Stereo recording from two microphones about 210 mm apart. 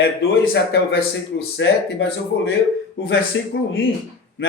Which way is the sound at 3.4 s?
60° left (ahead or behind).